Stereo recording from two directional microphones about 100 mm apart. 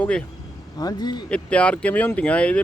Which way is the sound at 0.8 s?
40° left (ahead or behind).